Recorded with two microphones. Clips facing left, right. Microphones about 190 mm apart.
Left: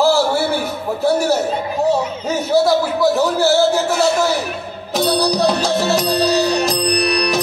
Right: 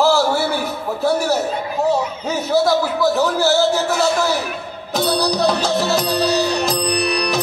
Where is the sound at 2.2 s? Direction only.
15° left (ahead or behind).